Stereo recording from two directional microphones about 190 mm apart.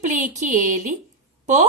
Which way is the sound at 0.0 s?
40° right (ahead or behind).